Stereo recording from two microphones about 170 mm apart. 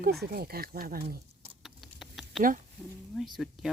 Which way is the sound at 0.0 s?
70° right (ahead or behind).